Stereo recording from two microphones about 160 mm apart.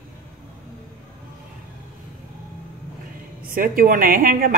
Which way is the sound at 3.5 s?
60° right (ahead or behind).